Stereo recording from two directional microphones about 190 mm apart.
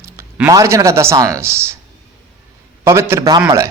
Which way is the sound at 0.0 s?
15° right (ahead or behind).